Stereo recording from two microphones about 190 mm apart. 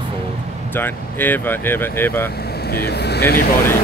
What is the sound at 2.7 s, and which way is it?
Speech, 55° left (ahead or behind).